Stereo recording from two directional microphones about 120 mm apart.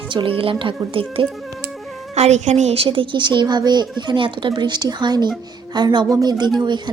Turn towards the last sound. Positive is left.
turn(degrees=-35)  # may be behind; listen again after turning